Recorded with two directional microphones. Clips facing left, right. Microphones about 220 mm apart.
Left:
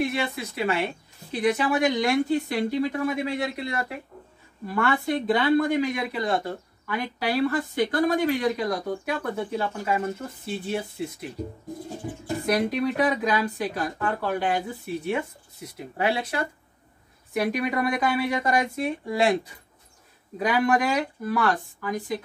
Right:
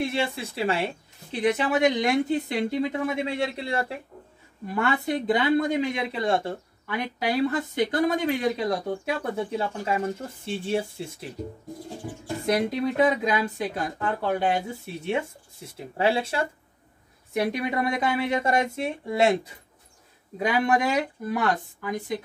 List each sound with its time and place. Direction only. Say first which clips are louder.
0.0 s speech: even; 30° right (ahead or behind)
12.4 s speech: even; 25° right (ahead or behind)
20.3 s speech: left 1 dB; 25° right (ahead or behind)